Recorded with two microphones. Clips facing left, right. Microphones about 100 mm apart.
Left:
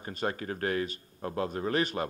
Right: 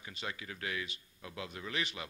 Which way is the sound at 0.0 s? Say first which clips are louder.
Left 10 dB; 45° left (ahead or behind).